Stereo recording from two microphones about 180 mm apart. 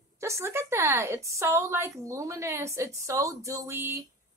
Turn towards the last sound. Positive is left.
turn(degrees=-10)  # may be behind; listen again after turning